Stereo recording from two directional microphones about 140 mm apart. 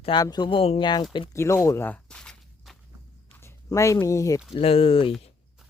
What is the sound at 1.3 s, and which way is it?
Walk, 20° left (ahead or behind).